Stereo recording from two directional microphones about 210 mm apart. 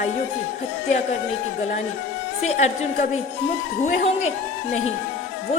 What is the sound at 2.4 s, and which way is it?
Speech, 35° left (ahead or behind).